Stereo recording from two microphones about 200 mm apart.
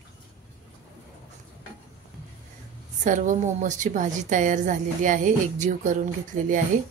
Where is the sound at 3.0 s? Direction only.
40° right (ahead or behind).